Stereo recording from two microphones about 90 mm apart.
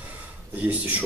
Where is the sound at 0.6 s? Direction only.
20° right (ahead or behind).